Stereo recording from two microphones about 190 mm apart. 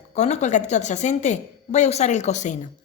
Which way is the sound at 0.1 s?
35° left (ahead or behind).